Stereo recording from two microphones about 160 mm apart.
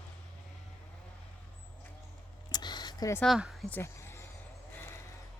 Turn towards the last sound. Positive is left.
turn(degrees=20)  # may be behind; listen again after turning